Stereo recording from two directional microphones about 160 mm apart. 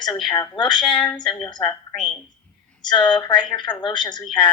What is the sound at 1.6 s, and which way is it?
Speech, 5° left (ahead or behind).